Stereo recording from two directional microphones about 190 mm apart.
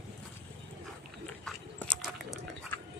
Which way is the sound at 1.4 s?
5° left (ahead or behind).